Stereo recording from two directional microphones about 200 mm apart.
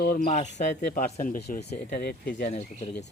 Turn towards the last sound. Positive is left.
turn(degrees=40)  # may be behind; listen again after turning